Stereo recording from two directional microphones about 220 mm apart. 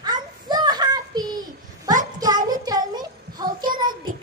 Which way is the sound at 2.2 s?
15° right (ahead or behind).